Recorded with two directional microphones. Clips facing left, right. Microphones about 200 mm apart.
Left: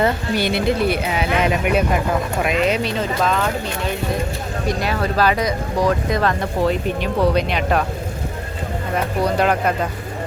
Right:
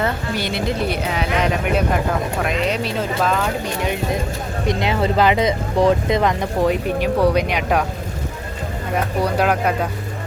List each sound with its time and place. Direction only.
0.0 s speech: 10° left (ahead or behind); by 3.5 s 5° right (ahead or behind)
4.6 s speech: 20° right (ahead or behind)
9.2 s speech: 10° right (ahead or behind)